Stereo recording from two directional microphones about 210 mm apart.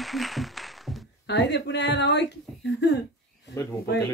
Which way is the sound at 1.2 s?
55° left (ahead or behind).